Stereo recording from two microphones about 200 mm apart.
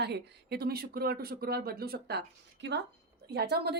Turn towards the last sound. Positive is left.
turn(degrees=-55)  # may be behind; listen again after turning